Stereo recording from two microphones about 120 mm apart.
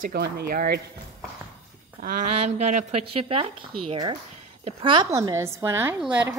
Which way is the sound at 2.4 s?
70° right (ahead or behind).